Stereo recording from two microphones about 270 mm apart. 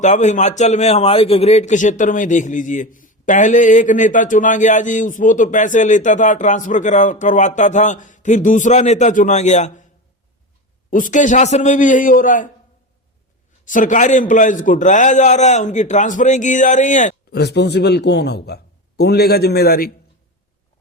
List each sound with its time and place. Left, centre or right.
0.0 s a man's voice: left
10.9 s a man's voice: left
13.7 s a man's voice: left